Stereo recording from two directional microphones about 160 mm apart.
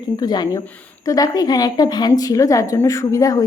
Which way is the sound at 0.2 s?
25° left (ahead or behind).